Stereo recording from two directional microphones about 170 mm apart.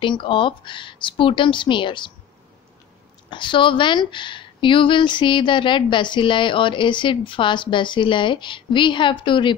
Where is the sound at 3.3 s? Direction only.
30° left (ahead or behind).